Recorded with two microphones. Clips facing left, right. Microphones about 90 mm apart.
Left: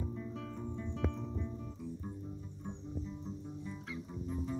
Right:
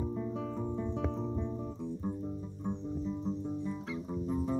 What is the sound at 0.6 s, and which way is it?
Music, 40° right (ahead or behind).